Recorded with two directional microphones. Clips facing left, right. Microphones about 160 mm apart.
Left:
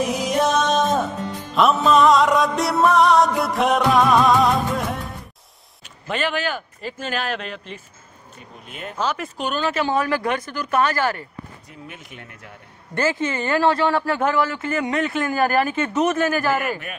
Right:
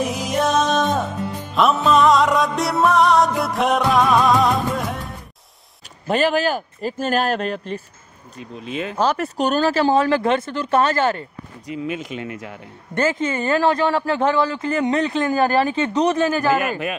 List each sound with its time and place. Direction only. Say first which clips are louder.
0.0 s music: left 1 dB; centre (ahead or behind)
6.0 s speech: right 6 dB; 40° right (ahead or behind)
8.4 s speech: right 10 dB; 90° right
8.9 s speech: right 4 dB; 35° right (ahead or behind)
11.6 s speech: right 13 dB; 90° right
12.9 s speech: right 2 dB; 25° right (ahead or behind)